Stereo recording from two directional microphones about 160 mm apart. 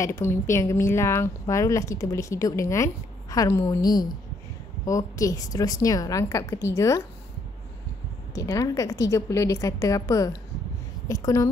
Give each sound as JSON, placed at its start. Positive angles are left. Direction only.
{"t": 0.0, "sound": "a woman's voice", "side_deg": 20}
{"t": 8.4, "sound": "a woman's voice", "side_deg": 20}